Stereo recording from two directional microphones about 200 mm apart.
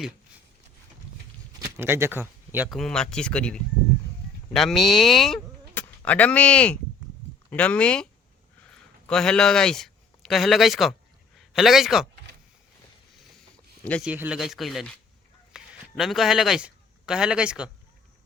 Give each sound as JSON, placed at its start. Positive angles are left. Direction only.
{"t": 1.5, "sound": "a sound", "side_deg": -10}
{"t": 2.6, "sound": "speech", "side_deg": 0}
{"t": 9.0, "sound": "a man's voice", "side_deg": 5}
{"t": 13.8, "sound": "speech", "side_deg": 5}
{"t": 14.1, "sound": "a man's voice", "side_deg": -5}